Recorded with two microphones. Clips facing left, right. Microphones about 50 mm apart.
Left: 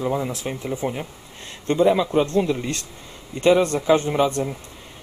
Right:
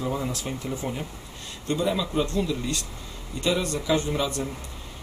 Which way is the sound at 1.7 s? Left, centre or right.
Left.